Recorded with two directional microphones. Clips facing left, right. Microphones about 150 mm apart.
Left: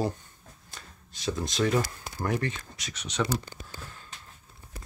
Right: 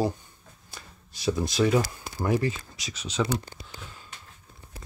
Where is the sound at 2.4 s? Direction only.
5° right (ahead or behind).